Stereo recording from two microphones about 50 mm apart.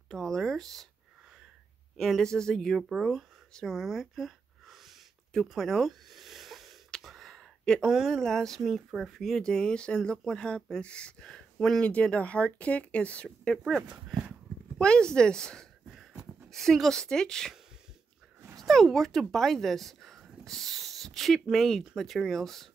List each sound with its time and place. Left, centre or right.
0.1 s a sound: centre
2.0 s a woman's voice: centre
3.6 s a sound: centre
7.0 s gasp: centre
7.8 s speech: centre
8.2 s a woman's voice: centre
8.5 s speech: centre
9.4 s a woman's voice: centre
11.5 s speech: centre
11.8 s speech: left
14.8 s a woman's voice: centre
18.6 s speech: centre